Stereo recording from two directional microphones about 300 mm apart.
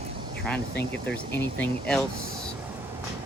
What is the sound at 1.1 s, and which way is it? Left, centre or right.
Speech, centre.